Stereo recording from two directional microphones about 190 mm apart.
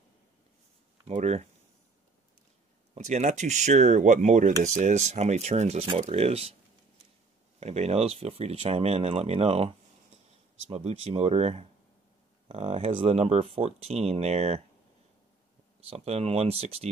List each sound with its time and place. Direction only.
1.0 s speech: 35° right (ahead or behind)
2.9 s speech: 40° right (ahead or behind)
7.6 s speech: 35° right (ahead or behind)
10.7 s speech: 35° right (ahead or behind)
15.9 s speech: 30° right (ahead or behind)